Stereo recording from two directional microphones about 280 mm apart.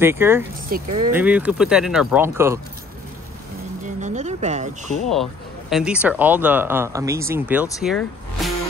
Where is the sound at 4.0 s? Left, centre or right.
Right.